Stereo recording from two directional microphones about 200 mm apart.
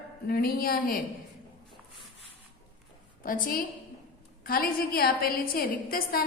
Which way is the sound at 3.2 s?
45° left (ahead or behind).